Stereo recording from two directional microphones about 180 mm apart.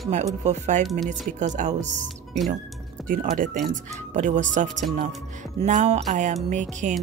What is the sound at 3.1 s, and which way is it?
A woman's voice, 50° right (ahead or behind).